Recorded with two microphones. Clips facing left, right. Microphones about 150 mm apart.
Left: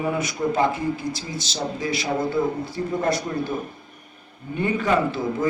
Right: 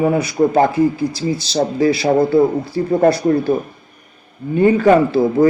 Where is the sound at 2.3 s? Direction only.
35° right (ahead or behind).